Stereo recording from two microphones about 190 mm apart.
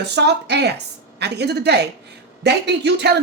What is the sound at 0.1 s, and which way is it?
Speech, 60° right (ahead or behind).